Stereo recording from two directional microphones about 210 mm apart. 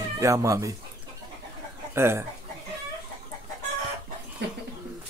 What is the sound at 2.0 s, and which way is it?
Speech, 10° right (ahead or behind).